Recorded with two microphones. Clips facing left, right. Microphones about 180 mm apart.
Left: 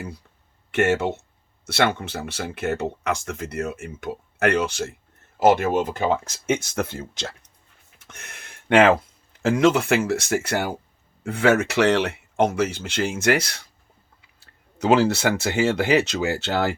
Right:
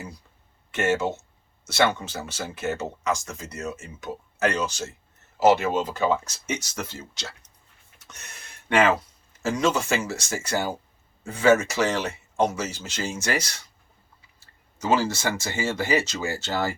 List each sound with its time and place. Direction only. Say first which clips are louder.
0.7 s speech: left 3 dB; 60° left (ahead or behind)